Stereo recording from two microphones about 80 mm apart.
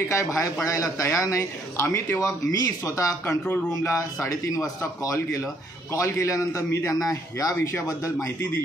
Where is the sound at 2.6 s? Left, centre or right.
Left.